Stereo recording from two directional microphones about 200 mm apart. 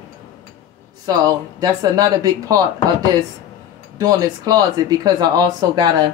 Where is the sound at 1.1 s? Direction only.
20° right (ahead or behind).